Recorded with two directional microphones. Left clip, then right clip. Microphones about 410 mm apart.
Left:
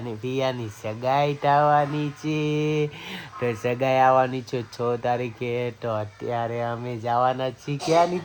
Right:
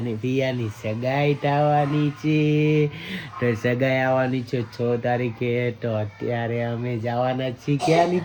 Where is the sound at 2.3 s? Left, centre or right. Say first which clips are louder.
Right 4 dB; centre.